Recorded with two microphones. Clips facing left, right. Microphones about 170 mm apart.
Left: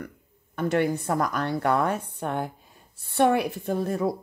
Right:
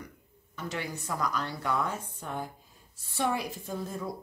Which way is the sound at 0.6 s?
55° left (ahead or behind).